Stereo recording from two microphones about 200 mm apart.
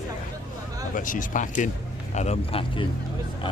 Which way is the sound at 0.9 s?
40° left (ahead or behind).